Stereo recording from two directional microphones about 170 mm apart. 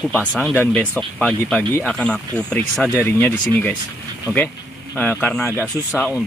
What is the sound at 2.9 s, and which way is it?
Speech, 15° left (ahead or behind).